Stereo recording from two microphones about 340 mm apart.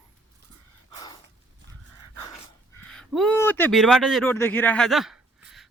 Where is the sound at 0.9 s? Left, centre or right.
Centre.